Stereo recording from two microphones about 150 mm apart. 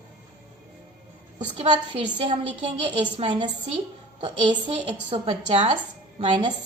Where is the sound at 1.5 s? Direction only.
40° right (ahead or behind).